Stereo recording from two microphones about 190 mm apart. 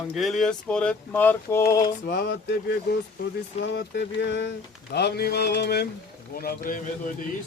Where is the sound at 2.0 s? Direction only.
55° left (ahead or behind).